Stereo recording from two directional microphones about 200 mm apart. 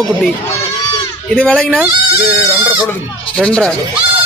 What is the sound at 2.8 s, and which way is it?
Speech, 5° left (ahead or behind).